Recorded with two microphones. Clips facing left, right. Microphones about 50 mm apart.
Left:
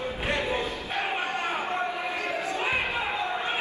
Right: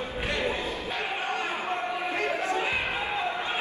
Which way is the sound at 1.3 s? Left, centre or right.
Left.